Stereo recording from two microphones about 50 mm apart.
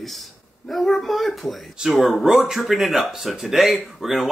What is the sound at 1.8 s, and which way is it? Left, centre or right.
Speech, centre.